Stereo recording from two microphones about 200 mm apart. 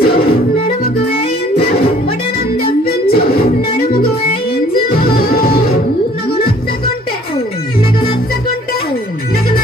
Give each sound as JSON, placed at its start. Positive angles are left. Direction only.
{"t": 0.0, "sound": "music", "side_deg": 50}
{"t": 2.9, "sound": "music", "side_deg": 50}
{"t": 4.9, "sound": "music", "side_deg": 45}